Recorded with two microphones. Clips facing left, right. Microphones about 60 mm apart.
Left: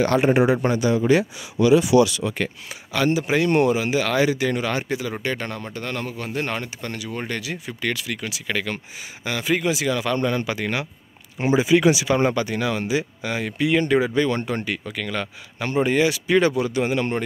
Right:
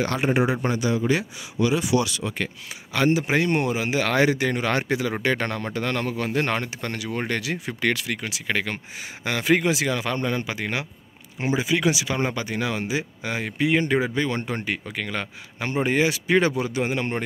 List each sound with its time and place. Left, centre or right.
0.0 s speech: left
2.9 s speech: right
3.4 s speech: centre
3.9 s speech: right
4.6 s a man's voice: right
8.2 s speech: right
9.2 s speech: right
9.8 s speech: right
10.2 s speech: centre
11.3 s speech: centre
12.4 s speech: centre